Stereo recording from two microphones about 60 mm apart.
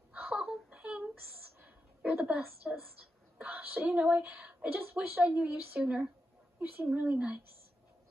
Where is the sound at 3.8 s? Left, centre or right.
Centre.